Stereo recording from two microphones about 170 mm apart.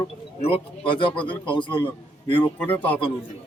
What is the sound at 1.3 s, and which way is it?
Speech, 30° left (ahead or behind).